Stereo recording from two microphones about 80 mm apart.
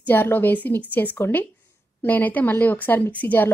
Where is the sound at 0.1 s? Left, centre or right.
Left.